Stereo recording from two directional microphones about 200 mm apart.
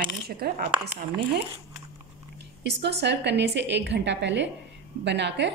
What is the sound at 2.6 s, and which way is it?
A woman's voice, 60° right (ahead or behind).